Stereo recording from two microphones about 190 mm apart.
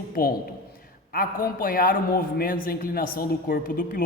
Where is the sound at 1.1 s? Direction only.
50° left (ahead or behind).